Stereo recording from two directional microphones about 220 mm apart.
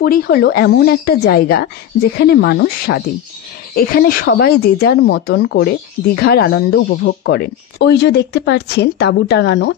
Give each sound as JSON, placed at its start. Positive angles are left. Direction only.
{"t": 0.0, "sound": "speech", "side_deg": 40}